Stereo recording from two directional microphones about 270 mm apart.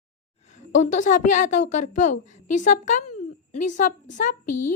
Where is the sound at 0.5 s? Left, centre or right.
Left.